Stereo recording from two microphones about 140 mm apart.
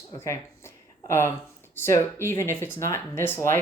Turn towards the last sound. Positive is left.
turn(degrees=15)  # may be behind; listen again after turning